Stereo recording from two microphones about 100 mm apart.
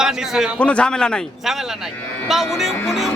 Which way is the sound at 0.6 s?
10° left (ahead or behind).